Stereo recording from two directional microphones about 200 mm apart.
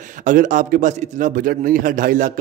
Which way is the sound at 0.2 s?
40° right (ahead or behind).